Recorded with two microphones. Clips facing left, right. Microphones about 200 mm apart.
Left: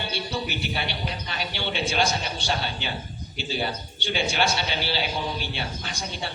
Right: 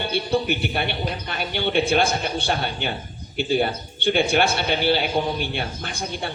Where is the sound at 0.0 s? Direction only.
55° right (ahead or behind).